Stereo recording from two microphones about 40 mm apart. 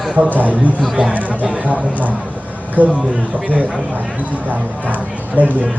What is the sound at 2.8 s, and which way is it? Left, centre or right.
Speech, right.